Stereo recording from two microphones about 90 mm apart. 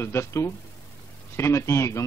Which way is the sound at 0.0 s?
30° left (ahead or behind).